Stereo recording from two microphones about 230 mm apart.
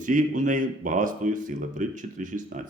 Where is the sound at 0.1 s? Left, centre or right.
Right.